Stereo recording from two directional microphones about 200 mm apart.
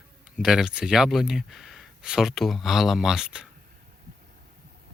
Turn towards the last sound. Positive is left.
turn(degrees=-5)  # may be behind; listen again after turning